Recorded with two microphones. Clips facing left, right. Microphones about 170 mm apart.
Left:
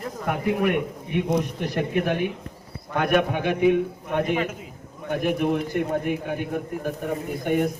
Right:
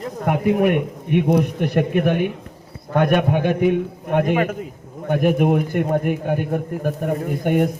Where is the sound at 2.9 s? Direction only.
45° right (ahead or behind).